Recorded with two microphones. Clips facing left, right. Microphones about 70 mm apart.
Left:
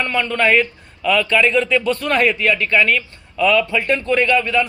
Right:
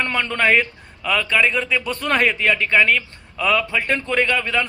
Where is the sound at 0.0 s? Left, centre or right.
Right.